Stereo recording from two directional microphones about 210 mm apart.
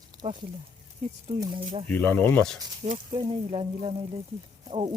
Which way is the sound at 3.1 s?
25° right (ahead or behind).